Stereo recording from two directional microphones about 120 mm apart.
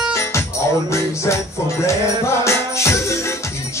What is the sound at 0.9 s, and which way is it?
Music, 25° left (ahead or behind).